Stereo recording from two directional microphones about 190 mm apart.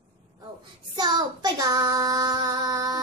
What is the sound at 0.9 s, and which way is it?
Child singing, 20° right (ahead or behind).